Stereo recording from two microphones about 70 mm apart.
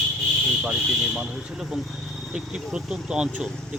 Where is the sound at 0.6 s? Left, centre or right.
Centre.